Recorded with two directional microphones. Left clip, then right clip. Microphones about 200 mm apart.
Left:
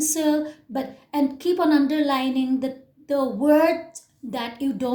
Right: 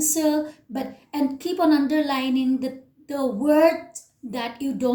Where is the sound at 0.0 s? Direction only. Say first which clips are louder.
Even; 45° left (ahead or behind).